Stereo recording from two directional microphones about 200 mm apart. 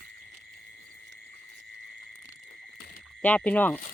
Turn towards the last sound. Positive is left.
turn(degrees=5)  # may be behind; listen again after turning